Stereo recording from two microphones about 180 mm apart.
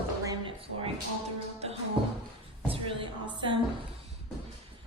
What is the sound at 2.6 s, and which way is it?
Speech, 30° right (ahead or behind).